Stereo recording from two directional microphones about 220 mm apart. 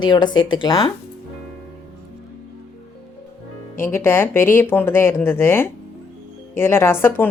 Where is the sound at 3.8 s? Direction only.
10° left (ahead or behind).